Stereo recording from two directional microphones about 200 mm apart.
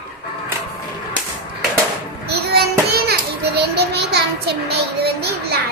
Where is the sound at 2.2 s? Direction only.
55° right (ahead or behind).